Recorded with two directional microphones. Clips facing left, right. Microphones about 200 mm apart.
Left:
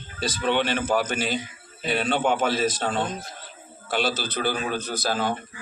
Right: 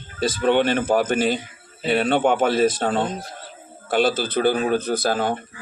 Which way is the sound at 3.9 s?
50° right (ahead or behind).